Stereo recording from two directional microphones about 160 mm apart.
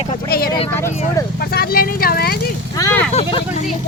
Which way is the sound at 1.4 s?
70° left (ahead or behind).